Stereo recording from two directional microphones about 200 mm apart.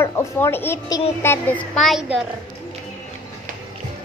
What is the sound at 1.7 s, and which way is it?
Speech, centre (ahead or behind).